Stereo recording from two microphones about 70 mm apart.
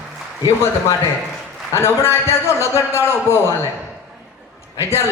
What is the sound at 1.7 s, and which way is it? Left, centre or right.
Speech, left.